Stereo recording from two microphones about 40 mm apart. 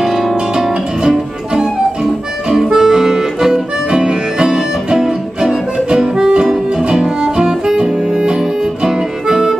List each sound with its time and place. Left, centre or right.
0.0 s guitar: centre
0.6 s music: centre
2.7 s music: centre